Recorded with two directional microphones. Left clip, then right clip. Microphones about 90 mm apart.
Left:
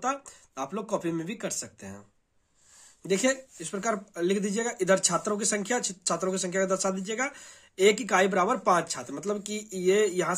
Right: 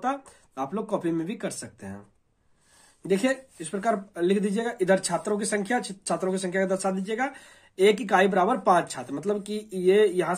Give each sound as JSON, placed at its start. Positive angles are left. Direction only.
{"t": 0.0, "sound": "speech", "side_deg": 20}
{"t": 3.1, "sound": "speech", "side_deg": 20}